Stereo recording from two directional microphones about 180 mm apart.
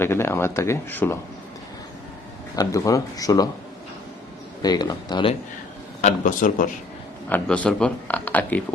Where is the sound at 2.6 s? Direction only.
20° left (ahead or behind).